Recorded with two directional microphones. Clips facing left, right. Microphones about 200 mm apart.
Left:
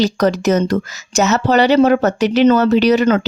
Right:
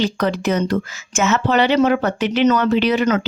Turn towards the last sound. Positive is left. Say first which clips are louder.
# left 4 dB
turn(degrees=35)  # may be behind; listen again after turning